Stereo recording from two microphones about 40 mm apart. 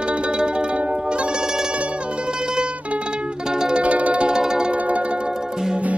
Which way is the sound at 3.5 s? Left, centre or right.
Right.